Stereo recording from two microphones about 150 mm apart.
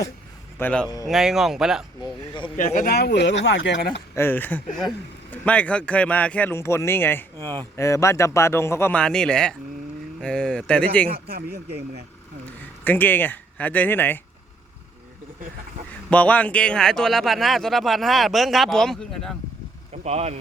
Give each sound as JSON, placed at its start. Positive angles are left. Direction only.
{"t": 0.6, "sound": "speech", "side_deg": 5}
{"t": 2.0, "sound": "speech", "side_deg": 35}
{"t": 2.6, "sound": "speech", "side_deg": 65}
{"t": 4.1, "sound": "speech", "side_deg": 15}
{"t": 7.3, "sound": "speech", "side_deg": -25}
{"t": 7.8, "sound": "speech", "side_deg": 20}
{"t": 11.1, "sound": "speech", "side_deg": -90}
{"t": 12.8, "sound": "speech", "side_deg": 10}
{"t": 16.0, "sound": "speech", "side_deg": 10}
{"t": 19.9, "sound": "speech", "side_deg": -45}